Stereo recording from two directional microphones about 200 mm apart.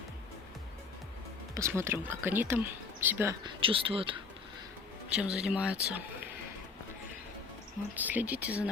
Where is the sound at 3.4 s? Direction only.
25° right (ahead or behind).